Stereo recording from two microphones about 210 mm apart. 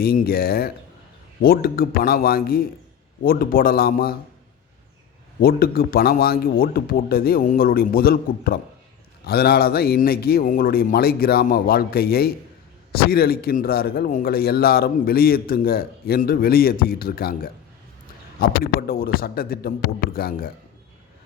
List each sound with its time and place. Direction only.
0.0 s speech: 45° left (ahead or behind)
5.4 s speech: 45° left (ahead or behind)